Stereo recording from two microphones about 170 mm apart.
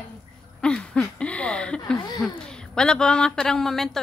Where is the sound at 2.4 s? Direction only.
5° left (ahead or behind).